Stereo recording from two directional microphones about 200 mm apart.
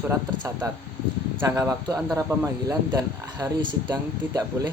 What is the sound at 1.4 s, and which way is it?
Speech, 15° right (ahead or behind).